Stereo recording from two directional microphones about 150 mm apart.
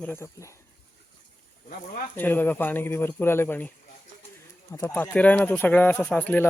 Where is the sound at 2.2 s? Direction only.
10° left (ahead or behind).